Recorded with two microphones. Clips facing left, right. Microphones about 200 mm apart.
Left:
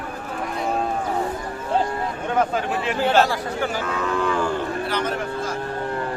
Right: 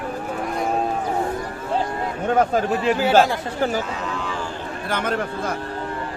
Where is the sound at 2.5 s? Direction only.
40° right (ahead or behind).